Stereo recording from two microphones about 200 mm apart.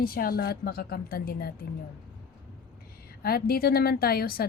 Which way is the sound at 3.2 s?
50° left (ahead or behind).